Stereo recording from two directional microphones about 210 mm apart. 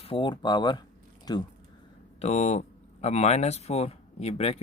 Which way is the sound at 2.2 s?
30° left (ahead or behind).